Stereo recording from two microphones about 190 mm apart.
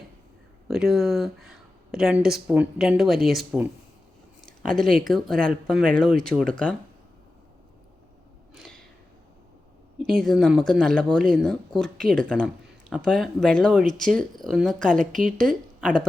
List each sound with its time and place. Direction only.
0.7 s speech: centre (ahead or behind)
4.4 s a sound: 5° left (ahead or behind)
5.0 s speech: centre (ahead or behind)
8.5 s a sound: centre (ahead or behind)
10.1 s speech: centre (ahead or behind)
14.8 s a woman's voice: 45° right (ahead or behind)